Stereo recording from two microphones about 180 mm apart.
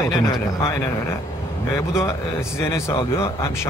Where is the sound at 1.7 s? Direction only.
15° left (ahead or behind).